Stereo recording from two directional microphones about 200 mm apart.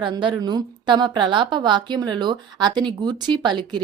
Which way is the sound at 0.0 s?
25° right (ahead or behind).